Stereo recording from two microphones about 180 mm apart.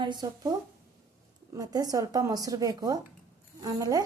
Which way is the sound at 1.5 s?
20° right (ahead or behind).